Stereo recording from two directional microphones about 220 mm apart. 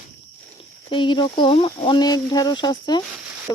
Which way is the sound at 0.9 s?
20° left (ahead or behind).